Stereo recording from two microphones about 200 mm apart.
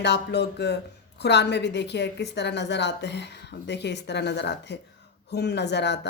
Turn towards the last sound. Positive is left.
turn(degrees=60)  # may be behind; listen again after turning